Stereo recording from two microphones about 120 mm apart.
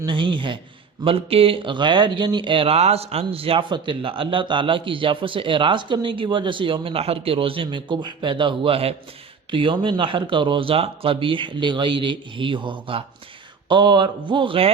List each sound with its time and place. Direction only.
0.0 s speech: 40° right (ahead or behind)